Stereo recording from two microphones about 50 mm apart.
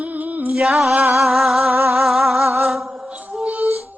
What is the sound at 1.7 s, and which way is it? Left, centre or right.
Music, right.